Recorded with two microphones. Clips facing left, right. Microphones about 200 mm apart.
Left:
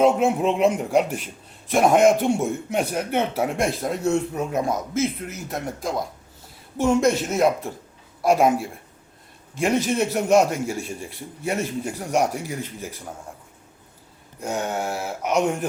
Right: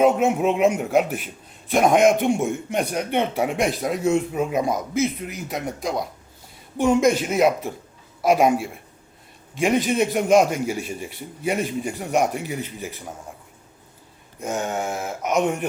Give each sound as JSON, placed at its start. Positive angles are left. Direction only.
{"t": 0.0, "sound": "speech", "side_deg": -5}
{"t": 4.1, "sound": "speech", "side_deg": -15}
{"t": 4.6, "sound": "speech", "side_deg": 0}
{"t": 14.4, "sound": "speech", "side_deg": 0}